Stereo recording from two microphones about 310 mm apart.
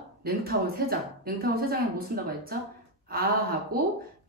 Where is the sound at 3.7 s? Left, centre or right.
Right.